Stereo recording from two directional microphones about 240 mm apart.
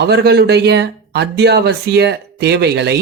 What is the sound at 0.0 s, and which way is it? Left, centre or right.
Speech, right.